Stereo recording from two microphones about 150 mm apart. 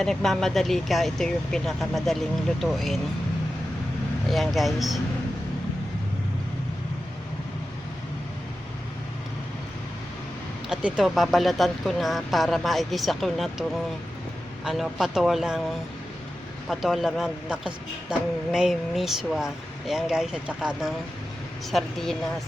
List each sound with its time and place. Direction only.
0.0 s speech: 5° left (ahead or behind)
4.3 s speech: centre (ahead or behind)
10.7 s speech: 5° right (ahead or behind)
16.6 s speech: centre (ahead or behind)